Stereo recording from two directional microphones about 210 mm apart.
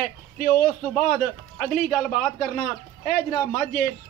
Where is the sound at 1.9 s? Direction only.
5° left (ahead or behind).